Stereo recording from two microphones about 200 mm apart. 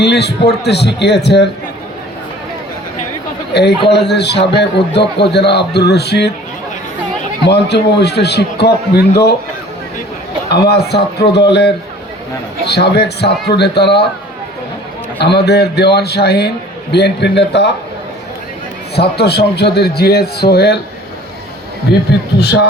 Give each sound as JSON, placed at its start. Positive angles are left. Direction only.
{"t": 0.0, "sound": "a man's voice", "side_deg": 55}
{"t": 3.5, "sound": "a man's voice", "side_deg": 55}
{"t": 7.4, "sound": "a man's voice", "side_deg": 55}
{"t": 10.5, "sound": "a man's voice", "side_deg": 55}
{"t": 15.2, "sound": "a man's voice", "side_deg": 55}
{"t": 18.9, "sound": "a man's voice", "side_deg": 55}
{"t": 21.9, "sound": "a man's voice", "side_deg": 55}